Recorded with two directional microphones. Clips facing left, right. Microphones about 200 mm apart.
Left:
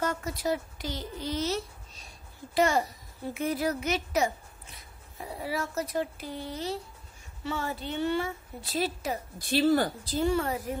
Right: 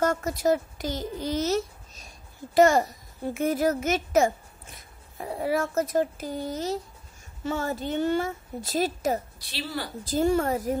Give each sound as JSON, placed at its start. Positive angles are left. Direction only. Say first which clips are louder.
{"t": 0.0, "sound": "a woman's voice", "louder": "right 6 dB", "side_deg": -45}
{"t": 9.4, "sound": "speech", "louder": "left 10 dB", "side_deg": 50}
{"t": 10.0, "sound": "a woman's voice", "louder": "right 4 dB", "side_deg": -45}